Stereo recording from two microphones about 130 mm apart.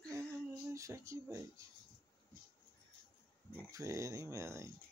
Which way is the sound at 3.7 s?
25° right (ahead or behind).